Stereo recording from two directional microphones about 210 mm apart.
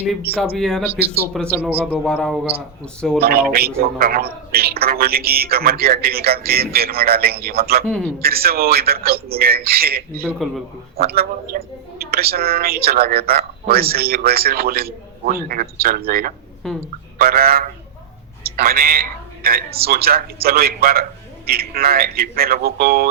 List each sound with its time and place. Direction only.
0.5 s a man's voice: centre (ahead or behind)
0.9 s a man's voice: 10° right (ahead or behind)
1.8 s a man's voice: 5° left (ahead or behind)
3.2 s a woman's voice: 45° right (ahead or behind)
10.2 s a man's voice: centre (ahead or behind)
10.9 s a woman's voice: 45° right (ahead or behind)
16.6 s a man's voice: centre (ahead or behind)
17.2 s a woman's voice: 45° right (ahead or behind)